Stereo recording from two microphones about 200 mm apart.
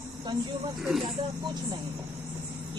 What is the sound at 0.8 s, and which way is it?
Speech, centre (ahead or behind).